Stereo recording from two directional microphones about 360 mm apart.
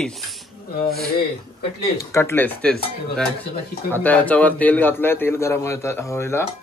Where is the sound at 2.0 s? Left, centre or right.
Centre.